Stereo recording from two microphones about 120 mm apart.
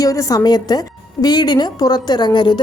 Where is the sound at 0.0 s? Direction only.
30° left (ahead or behind).